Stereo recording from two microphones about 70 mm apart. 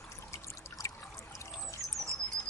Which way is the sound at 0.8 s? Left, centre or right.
Left.